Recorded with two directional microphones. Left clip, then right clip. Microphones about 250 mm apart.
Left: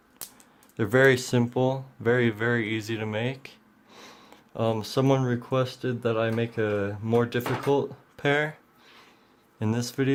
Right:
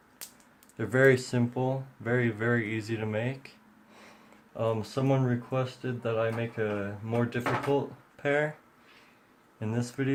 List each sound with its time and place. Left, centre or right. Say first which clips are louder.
0.8 s speech: left 3 dB; left
4.5 s speech: left 4 dB; left
9.6 s speech: left 5 dB; left